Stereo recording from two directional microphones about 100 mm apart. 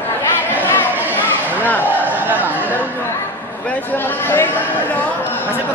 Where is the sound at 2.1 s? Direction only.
15° right (ahead or behind).